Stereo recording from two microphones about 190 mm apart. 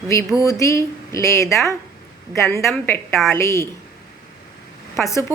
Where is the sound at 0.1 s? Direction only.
15° left (ahead or behind).